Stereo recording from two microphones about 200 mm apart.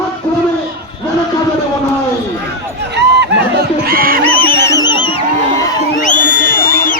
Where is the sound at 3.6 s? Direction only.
50° right (ahead or behind).